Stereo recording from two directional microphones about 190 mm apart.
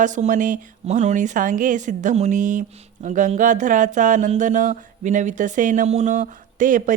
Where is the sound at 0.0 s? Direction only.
40° right (ahead or behind).